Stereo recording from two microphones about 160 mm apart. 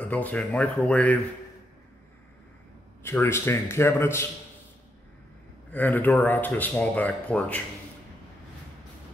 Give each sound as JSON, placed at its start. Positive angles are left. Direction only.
{"t": 0.0, "sound": "speech", "side_deg": 10}
{"t": 3.0, "sound": "speech", "side_deg": 15}
{"t": 5.7, "sound": "speech", "side_deg": 10}